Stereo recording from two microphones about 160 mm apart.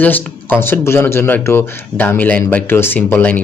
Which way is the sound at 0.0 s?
10° left (ahead or behind).